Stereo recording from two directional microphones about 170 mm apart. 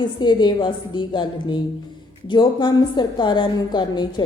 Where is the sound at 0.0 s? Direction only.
25° left (ahead or behind).